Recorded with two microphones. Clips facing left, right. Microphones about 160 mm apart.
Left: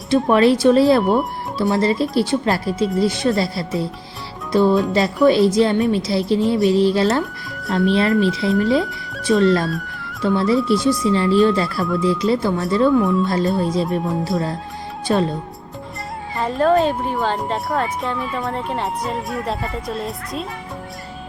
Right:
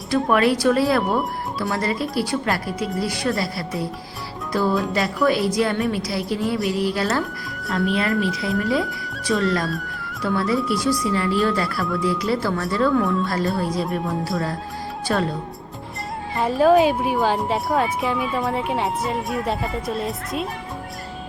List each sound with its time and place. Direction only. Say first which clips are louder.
0.1 s a woman's voice: left 4 dB; 25° left (ahead or behind)
4.7 s a woman's voice: left 5 dB; centre (ahead or behind)
4.9 s a woman's voice: left 7 dB; 20° left (ahead or behind)
8.8 s music: left 1 dB; centre (ahead or behind)
9.2 s a woman's voice: left 6 dB; 25° left (ahead or behind)
9.6 s music: left 2 dB; centre (ahead or behind)
10.2 s a woman's voice: left 5 dB; 25° left (ahead or behind)
16.4 s a woman's voice: right 1 dB; 5° right (ahead or behind)